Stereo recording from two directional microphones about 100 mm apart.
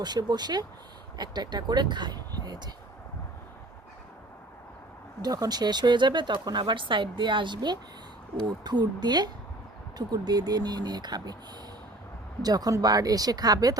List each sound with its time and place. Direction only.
0.0 s speech: 45° right (ahead or behind)
5.2 s speech: 40° right (ahead or behind)
12.4 s speech: 40° right (ahead or behind)